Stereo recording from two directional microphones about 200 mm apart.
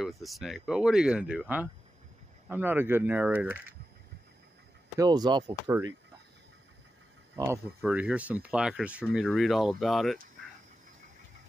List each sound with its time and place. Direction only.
0.0 s speech: centre (ahead or behind)
4.9 s speech: 20° right (ahead or behind)
7.3 s speech: 15° right (ahead or behind)